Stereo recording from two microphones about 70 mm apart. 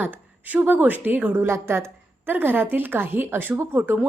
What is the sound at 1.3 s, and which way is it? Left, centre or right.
A woman's voice, right.